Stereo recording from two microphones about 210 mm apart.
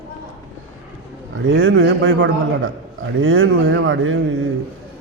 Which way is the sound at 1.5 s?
65° right (ahead or behind).